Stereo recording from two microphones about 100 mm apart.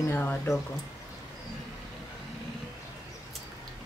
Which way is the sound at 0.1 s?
20° left (ahead or behind).